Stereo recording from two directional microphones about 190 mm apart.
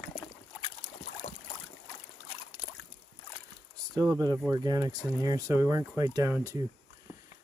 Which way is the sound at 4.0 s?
20° right (ahead or behind).